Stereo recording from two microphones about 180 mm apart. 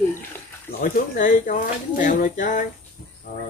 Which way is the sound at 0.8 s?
45° left (ahead or behind).